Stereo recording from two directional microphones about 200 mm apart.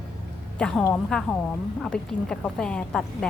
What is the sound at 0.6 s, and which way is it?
A woman's voice, 5° left (ahead or behind).